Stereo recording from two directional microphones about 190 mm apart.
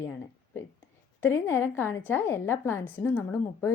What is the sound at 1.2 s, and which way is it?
A woman's voice, 15° left (ahead or behind).